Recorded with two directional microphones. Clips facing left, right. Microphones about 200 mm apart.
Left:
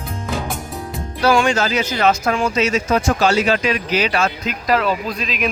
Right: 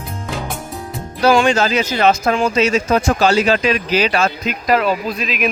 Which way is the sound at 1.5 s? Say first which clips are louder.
Right 3 dB; 30° right (ahead or behind).